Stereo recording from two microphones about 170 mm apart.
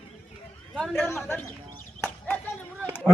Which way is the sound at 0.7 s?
5° left (ahead or behind).